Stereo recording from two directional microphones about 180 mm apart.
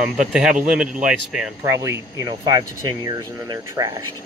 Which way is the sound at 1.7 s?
15° right (ahead or behind).